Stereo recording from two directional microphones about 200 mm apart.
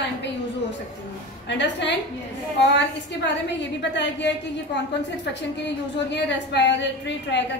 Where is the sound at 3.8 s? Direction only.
60° left (ahead or behind).